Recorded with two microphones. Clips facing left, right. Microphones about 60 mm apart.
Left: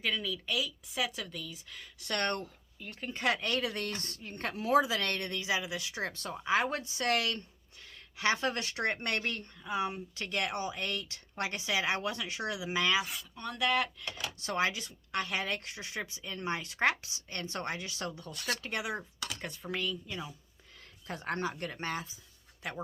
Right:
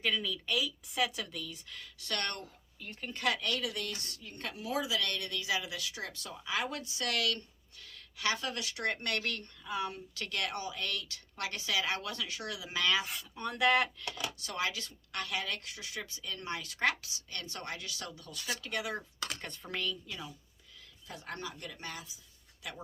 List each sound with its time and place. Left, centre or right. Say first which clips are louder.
0.0 s speech: even; centre
2.0 s speech: left 4 dB; left
2.8 s speech: left 2 dB; centre
3.2 s speech: left 2 dB; left
13.0 s speech: left 2 dB; centre
13.4 s speech: right 2 dB; centre
14.3 s speech: left 8 dB; left
19.4 s speech: left 6 dB; centre
20.1 s speech: left 3 dB; left
21.1 s a man's voice: left 7 dB; left